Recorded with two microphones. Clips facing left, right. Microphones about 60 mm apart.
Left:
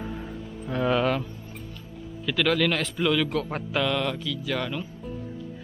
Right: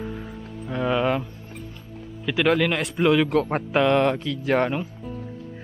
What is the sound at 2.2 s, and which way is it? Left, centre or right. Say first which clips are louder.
A man's voice: right 3 dB; right.